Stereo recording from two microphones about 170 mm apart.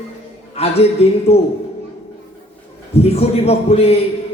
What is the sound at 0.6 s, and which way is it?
Speech, 35° left (ahead or behind).